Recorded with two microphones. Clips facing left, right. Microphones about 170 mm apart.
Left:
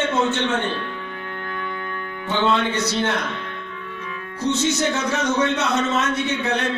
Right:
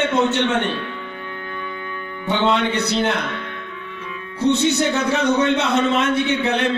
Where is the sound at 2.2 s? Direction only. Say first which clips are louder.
Right 2 dB; 65° right (ahead or behind).